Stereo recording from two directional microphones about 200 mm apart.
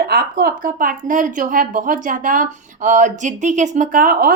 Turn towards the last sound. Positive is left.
turn(degrees=-45)  # may be behind; listen again after turning